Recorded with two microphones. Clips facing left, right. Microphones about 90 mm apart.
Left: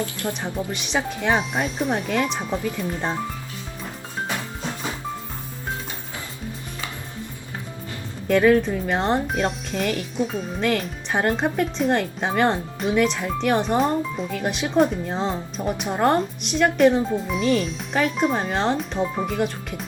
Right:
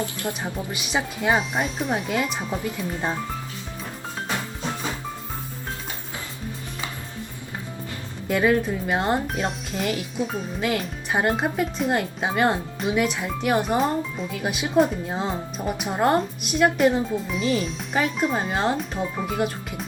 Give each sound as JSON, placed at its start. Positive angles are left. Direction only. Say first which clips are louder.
{"t": 0.0, "sound": "speech", "louder": "left 1 dB", "side_deg": -20}
{"t": 8.3, "sound": "speech", "louder": "left 4 dB", "side_deg": -5}